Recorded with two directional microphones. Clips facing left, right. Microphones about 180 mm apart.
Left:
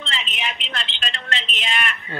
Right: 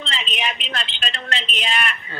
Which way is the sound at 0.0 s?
20° right (ahead or behind).